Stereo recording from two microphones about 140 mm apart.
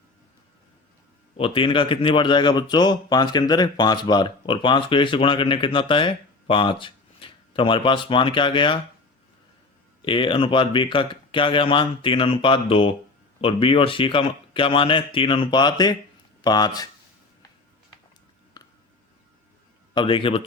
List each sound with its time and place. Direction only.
1.4 s speech: 40° left (ahead or behind)
10.0 s speech: 40° left (ahead or behind)
18.5 s music: 25° left (ahead or behind)
19.9 s speech: 35° left (ahead or behind)